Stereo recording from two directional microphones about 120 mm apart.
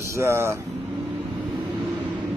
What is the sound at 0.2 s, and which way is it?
Speech, 25° right (ahead or behind).